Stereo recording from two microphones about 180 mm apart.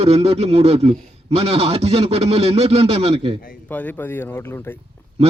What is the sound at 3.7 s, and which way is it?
Speech, 10° left (ahead or behind).